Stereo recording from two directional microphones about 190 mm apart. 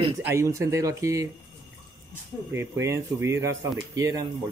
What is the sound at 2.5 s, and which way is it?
Speech, 15° right (ahead or behind).